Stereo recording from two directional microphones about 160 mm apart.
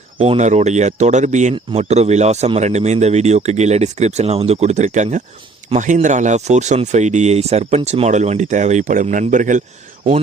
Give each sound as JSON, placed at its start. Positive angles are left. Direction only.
{"t": 0.2, "sound": "speech", "side_deg": -40}